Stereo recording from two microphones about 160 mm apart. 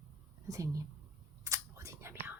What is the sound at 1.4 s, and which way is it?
Whispering, 20° right (ahead or behind).